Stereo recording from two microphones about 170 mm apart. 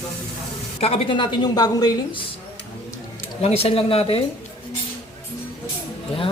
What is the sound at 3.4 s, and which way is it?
Speech, 35° left (ahead or behind).